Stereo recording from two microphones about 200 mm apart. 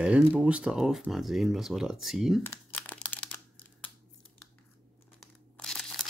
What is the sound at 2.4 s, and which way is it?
Crumpling, 10° left (ahead or behind).